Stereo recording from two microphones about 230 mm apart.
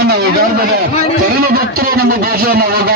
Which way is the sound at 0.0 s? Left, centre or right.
Right.